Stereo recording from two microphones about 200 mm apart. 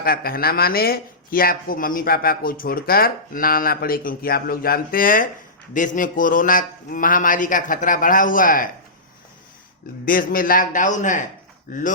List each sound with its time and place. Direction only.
0.0 s speech: 50° left (ahead or behind)
10.1 s a man's voice: 45° left (ahead or behind)